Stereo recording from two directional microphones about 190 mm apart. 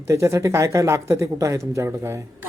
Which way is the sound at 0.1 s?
15° right (ahead or behind).